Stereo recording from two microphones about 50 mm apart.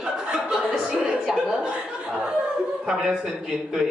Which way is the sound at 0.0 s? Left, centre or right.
Centre.